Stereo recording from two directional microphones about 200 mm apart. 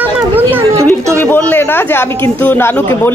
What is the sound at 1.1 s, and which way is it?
Speech, 10° left (ahead or behind).